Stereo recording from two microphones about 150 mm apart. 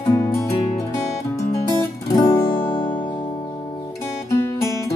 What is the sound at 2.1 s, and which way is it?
Guitar, 20° left (ahead or behind).